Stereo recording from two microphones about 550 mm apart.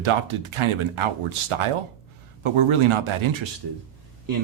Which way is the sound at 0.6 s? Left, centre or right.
Right.